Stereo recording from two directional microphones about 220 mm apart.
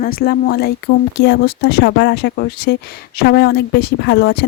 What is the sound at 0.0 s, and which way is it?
Speech, 40° left (ahead or behind).